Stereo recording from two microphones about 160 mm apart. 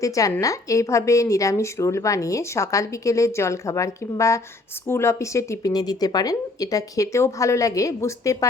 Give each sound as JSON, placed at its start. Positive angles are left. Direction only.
{"t": 0.0, "sound": "a woman's voice", "side_deg": 20}